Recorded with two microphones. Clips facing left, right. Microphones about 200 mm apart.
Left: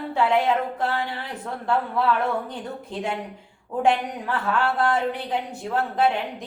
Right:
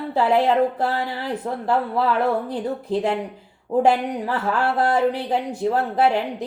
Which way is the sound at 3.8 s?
40° right (ahead or behind).